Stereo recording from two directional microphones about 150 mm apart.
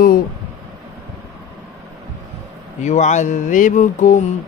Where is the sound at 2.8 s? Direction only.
50° left (ahead or behind).